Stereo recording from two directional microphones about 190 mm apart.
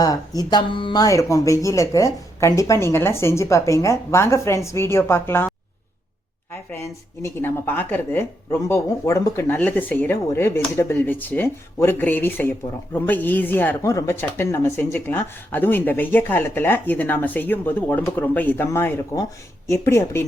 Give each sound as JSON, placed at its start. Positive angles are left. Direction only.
{"t": 0.0, "sound": "speech", "side_deg": 20}
{"t": 6.7, "sound": "speech", "side_deg": 15}